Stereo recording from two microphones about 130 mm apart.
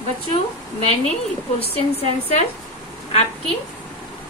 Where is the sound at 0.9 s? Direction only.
50° left (ahead or behind).